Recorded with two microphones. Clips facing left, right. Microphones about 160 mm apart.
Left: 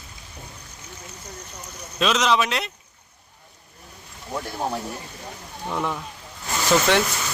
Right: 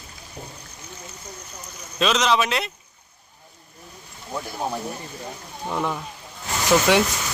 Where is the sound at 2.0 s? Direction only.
Centre (ahead or behind).